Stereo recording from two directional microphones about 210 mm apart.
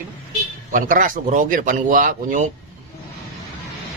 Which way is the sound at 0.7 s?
40° right (ahead or behind).